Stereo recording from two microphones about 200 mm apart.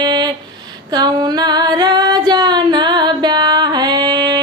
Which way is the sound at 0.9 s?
20° right (ahead or behind).